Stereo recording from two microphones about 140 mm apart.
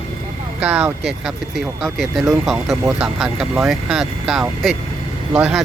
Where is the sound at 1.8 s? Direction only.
Centre (ahead or behind).